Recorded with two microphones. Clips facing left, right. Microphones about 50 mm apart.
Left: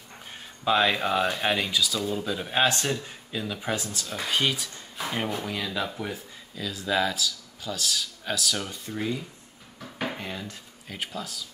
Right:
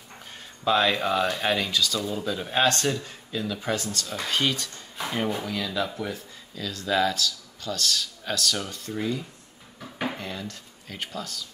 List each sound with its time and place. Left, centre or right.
0.7 s speech: centre
9.8 s dishes: centre
10.1 s speech: centre